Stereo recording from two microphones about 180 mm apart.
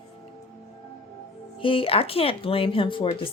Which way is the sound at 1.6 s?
30° left (ahead or behind).